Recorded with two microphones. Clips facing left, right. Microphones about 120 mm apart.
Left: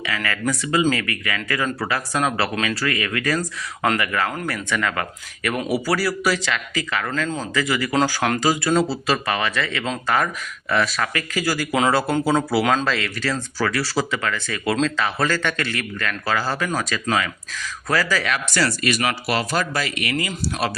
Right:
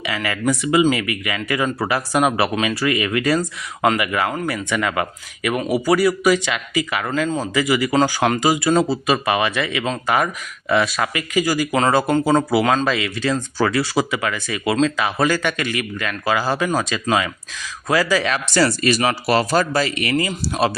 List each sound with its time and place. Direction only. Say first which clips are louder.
0.0 s speech: right 3 dB; 20° right (ahead or behind)
4.4 s speech: right 3 dB; 5° right (ahead or behind)
4.7 s speech: right 2 dB; 15° right (ahead or behind)
10.9 s speech: right 4 dB; 15° right (ahead or behind)
13.9 s speech: right 3 dB; 10° right (ahead or behind)
18.3 s speech: right 4 dB; 30° right (ahead or behind)